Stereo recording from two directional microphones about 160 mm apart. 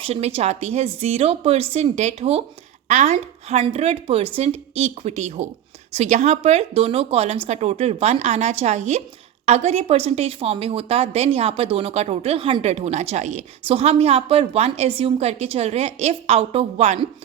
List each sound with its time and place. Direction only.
0.0 s a woman's voice: 40° right (ahead or behind)